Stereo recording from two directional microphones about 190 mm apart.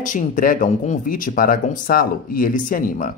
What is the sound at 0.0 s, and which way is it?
Speech, 45° left (ahead or behind).